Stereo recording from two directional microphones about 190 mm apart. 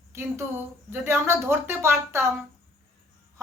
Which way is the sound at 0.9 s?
15° right (ahead or behind).